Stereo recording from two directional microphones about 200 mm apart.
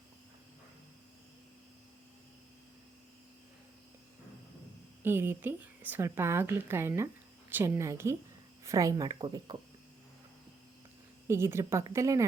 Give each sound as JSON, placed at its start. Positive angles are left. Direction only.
{"t": 5.0, "sound": "a woman's voice", "side_deg": -10}
{"t": 11.3, "sound": "a woman's voice", "side_deg": -15}